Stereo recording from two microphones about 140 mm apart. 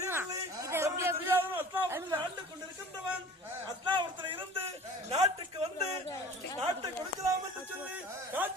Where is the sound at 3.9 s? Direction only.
35° right (ahead or behind).